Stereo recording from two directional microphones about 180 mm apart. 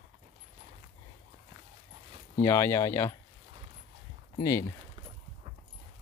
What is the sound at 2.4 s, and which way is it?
Speech, 15° left (ahead or behind).